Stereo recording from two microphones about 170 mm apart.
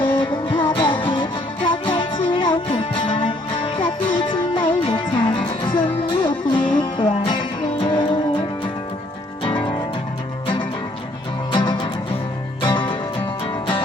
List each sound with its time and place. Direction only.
0.2 s music: 30° left (ahead or behind)
10.4 s music: 30° left (ahead or behind)